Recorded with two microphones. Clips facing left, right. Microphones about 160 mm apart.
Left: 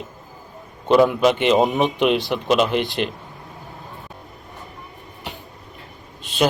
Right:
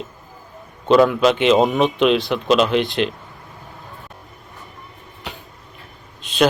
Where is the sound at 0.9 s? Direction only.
15° left (ahead or behind).